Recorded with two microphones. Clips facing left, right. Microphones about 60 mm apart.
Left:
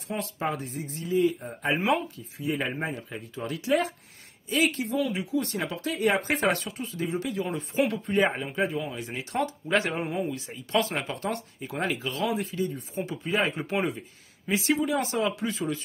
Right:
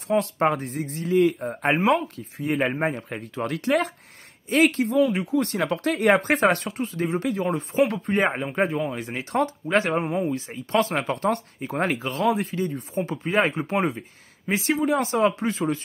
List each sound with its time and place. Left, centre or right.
0.1 s speech: right
12.4 s speech: right
13.6 s speech: right